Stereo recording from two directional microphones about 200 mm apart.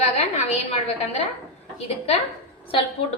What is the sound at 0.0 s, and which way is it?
A woman's voice, 30° left (ahead or behind).